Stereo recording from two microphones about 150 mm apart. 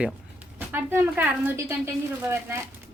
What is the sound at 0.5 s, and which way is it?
A woman's voice, 15° right (ahead or behind).